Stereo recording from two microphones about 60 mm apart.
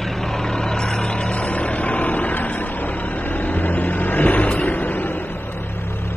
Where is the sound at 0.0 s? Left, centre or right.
Centre.